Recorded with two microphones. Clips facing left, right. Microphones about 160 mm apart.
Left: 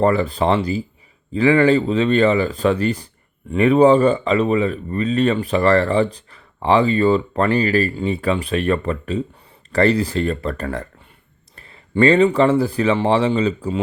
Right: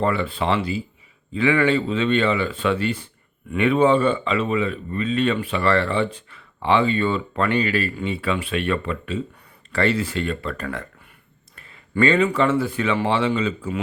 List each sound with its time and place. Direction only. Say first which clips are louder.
0.0 s speech: left 5 dB; 40° left (ahead or behind)